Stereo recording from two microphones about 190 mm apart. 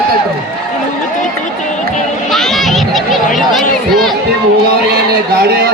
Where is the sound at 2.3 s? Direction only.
Centre (ahead or behind).